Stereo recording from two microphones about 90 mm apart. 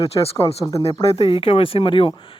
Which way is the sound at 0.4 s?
35° left (ahead or behind).